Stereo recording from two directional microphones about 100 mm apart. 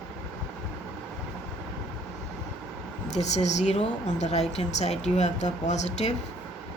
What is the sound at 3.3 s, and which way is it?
Speech, 90° left.